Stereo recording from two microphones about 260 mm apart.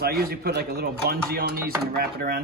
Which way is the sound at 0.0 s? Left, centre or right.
Right.